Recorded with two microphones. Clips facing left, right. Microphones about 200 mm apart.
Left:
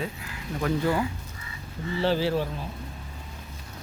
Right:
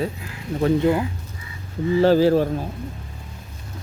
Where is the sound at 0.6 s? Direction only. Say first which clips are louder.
Right 7 dB; 20° right (ahead or behind).